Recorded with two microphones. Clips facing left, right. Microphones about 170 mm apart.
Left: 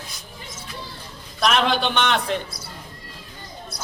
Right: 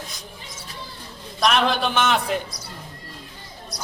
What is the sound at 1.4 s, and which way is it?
A man's voice, centre (ahead or behind).